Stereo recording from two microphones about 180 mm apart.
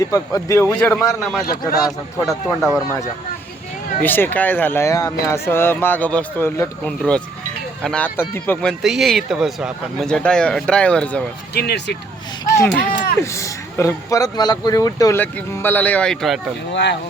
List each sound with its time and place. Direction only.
0.0 s speech: 20° left (ahead or behind)
0.9 s speech: centre (ahead or behind)
2.5 s speech: centre (ahead or behind)
4.0 s speech: 10° left (ahead or behind)
8.8 s speech: centre (ahead or behind)
11.5 s speech: 65° left (ahead or behind)
12.5 s speech: 15° left (ahead or behind)
12.9 s speech: 50° left (ahead or behind)
13.2 s speech: 15° left (ahead or behind)
16.7 s speech: 80° left